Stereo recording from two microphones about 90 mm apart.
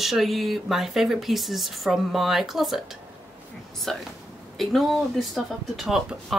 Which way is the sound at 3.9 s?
5° left (ahead or behind).